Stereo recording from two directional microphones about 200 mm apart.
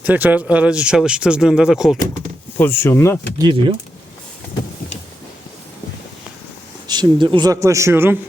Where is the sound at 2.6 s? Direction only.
10° left (ahead or behind).